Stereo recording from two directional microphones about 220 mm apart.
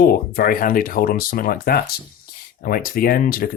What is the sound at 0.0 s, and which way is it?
Speech, 40° left (ahead or behind).